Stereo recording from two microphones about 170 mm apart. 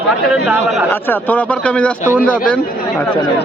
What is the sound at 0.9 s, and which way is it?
A man's voice, 10° left (ahead or behind).